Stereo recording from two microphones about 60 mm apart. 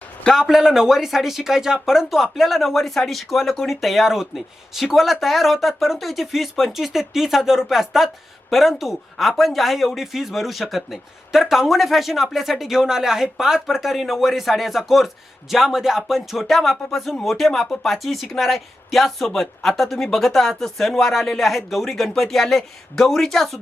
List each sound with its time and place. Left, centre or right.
0.3 s speech: centre